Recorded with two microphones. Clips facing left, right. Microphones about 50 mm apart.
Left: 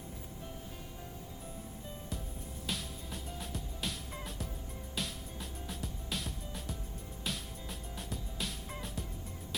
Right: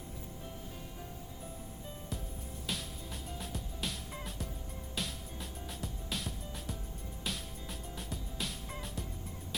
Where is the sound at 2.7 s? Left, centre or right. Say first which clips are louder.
Even; centre.